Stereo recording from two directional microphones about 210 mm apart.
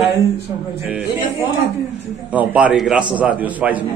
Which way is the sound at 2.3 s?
5° right (ahead or behind).